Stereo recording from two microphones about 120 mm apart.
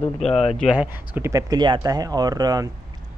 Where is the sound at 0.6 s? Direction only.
10° right (ahead or behind).